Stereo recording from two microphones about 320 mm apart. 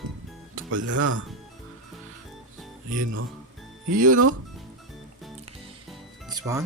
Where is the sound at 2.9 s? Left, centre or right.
Right.